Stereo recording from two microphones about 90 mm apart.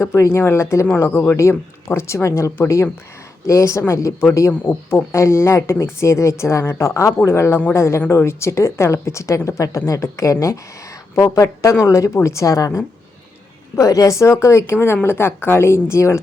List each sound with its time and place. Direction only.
0.0 s a woman's voice: 35° left (ahead or behind)